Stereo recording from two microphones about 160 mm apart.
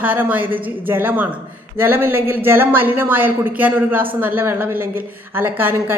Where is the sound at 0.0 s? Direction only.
10° right (ahead or behind).